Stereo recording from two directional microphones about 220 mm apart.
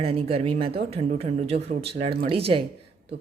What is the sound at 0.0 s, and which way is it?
Speech, 25° right (ahead or behind).